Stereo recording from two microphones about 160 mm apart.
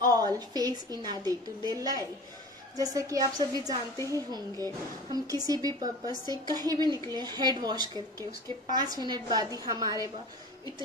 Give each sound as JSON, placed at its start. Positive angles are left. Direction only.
{"t": 0.0, "sound": "a woman's voice", "side_deg": -25}